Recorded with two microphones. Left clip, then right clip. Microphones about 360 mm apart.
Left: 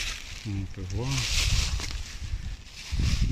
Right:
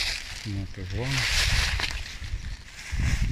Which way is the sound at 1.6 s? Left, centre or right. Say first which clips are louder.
Right 7 dB; right.